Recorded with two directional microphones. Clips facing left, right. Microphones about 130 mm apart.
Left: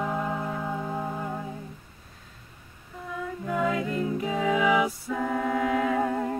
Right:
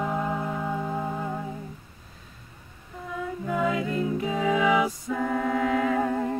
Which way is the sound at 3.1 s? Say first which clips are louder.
Right 1 dB; centre (ahead or behind).